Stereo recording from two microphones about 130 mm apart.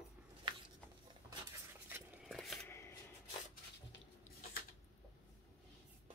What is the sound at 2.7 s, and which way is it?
Shuffling cards, 20° left (ahead or behind).